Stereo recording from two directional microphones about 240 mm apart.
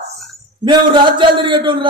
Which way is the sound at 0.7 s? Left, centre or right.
Centre.